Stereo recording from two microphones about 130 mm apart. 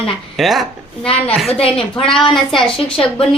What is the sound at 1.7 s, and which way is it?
Speech, 5° left (ahead or behind).